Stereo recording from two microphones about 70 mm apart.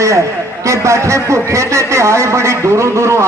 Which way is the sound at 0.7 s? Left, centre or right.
Right.